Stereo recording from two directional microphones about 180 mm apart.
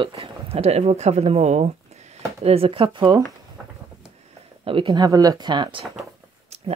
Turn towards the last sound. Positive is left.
turn(degrees=-35)  # may be behind; listen again after turning